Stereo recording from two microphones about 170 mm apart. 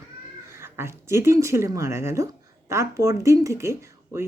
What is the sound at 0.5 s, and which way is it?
Speech, 15° right (ahead or behind).